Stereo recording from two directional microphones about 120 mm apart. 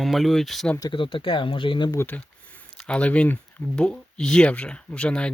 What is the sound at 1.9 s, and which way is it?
Speech, 15° left (ahead or behind).